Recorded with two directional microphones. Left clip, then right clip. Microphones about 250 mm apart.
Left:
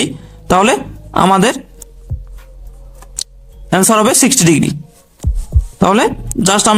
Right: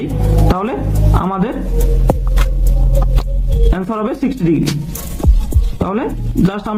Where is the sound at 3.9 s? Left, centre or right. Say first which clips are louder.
Left 10 dB; left.